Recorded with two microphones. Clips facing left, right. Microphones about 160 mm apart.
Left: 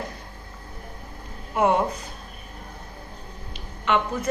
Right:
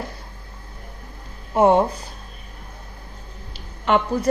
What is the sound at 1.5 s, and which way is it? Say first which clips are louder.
Speech: right 5 dB; 30° right (ahead or behind).